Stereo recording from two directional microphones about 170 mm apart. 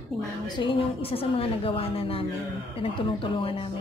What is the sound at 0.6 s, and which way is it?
A woman's voice, 30° left (ahead or behind).